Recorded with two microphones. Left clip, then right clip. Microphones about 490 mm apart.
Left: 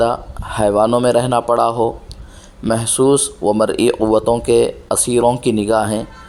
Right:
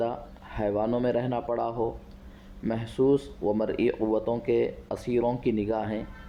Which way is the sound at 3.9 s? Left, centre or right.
Right.